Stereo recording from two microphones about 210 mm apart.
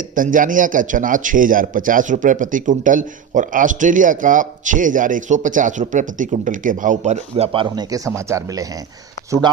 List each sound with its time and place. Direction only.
0.1 s a man's voice: 40° right (ahead or behind); by 8.6 s 15° right (ahead or behind)